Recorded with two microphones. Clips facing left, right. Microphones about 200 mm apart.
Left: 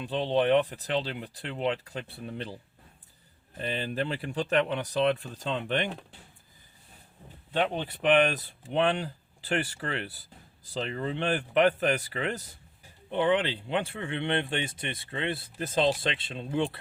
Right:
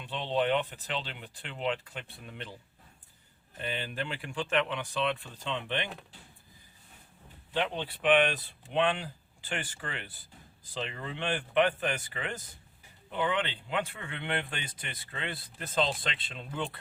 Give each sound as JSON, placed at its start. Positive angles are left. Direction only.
{"t": 0.0, "sound": "speech", "side_deg": 35}
{"t": 3.6, "sound": "speech", "side_deg": 35}
{"t": 7.5, "sound": "speech", "side_deg": 50}
{"t": 10.8, "sound": "speech", "side_deg": 35}